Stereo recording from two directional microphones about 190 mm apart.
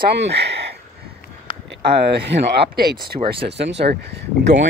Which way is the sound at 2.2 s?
60° right (ahead or behind).